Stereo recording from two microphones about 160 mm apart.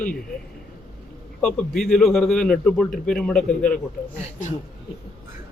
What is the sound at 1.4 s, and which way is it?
A man's voice, 5° left (ahead or behind).